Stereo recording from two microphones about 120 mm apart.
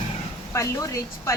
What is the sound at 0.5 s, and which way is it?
Speech, 25° left (ahead or behind).